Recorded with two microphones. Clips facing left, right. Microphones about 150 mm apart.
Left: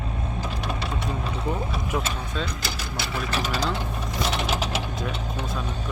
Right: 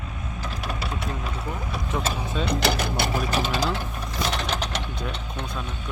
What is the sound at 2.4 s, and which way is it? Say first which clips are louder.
Speech: right 8 dB; 70° right (ahead or behind).